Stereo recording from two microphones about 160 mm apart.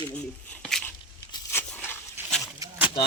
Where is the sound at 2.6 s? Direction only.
20° right (ahead or behind).